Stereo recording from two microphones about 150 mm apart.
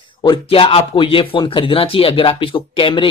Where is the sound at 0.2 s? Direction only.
35° left (ahead or behind).